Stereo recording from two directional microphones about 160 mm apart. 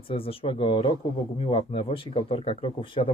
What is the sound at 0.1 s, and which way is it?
Speech, 35° left (ahead or behind).